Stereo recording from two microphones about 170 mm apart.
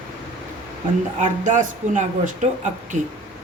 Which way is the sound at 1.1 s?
45° right (ahead or behind).